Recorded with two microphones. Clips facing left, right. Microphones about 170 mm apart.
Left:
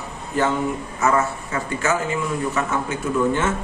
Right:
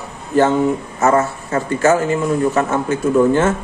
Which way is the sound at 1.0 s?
45° right (ahead or behind).